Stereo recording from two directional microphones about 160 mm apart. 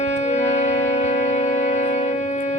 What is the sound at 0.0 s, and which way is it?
Music, 45° left (ahead or behind).